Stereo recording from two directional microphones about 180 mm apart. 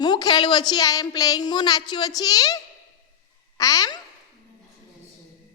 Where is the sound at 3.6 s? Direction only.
20° left (ahead or behind).